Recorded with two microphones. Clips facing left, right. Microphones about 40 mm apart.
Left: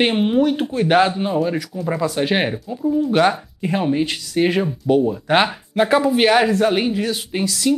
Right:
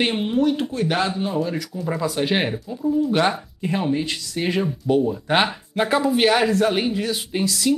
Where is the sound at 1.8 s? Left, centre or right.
Centre.